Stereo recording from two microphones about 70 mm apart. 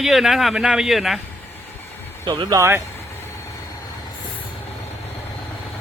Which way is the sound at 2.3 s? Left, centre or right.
Right.